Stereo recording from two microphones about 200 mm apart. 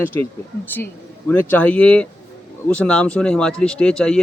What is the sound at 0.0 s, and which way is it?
Speech, 10° left (ahead or behind).